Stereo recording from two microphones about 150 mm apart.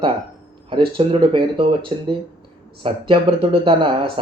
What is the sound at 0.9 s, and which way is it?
Speech, 35° right (ahead or behind).